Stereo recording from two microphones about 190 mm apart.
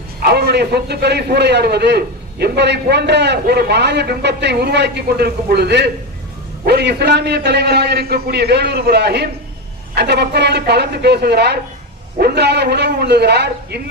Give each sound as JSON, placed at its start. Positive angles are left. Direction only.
{"t": 0.2, "sound": "a man's voice", "side_deg": -55}